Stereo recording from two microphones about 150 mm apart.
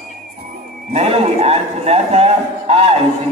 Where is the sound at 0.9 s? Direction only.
45° right (ahead or behind).